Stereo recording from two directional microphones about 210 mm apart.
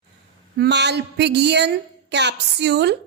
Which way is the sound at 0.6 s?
55° right (ahead or behind).